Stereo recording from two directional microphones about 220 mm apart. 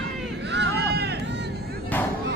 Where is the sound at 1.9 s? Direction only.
10° left (ahead or behind).